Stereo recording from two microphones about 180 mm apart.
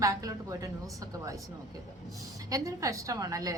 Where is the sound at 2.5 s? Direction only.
20° right (ahead or behind).